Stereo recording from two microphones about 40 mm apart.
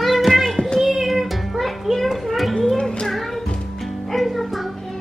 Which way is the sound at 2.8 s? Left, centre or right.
Centre.